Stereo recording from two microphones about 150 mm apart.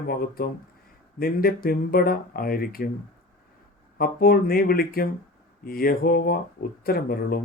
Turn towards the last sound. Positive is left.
turn(degrees=80)